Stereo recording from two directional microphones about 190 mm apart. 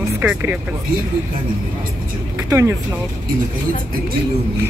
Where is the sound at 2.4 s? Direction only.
15° right (ahead or behind).